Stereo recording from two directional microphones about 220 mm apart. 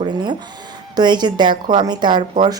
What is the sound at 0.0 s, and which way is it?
A woman's voice, 20° right (ahead or behind).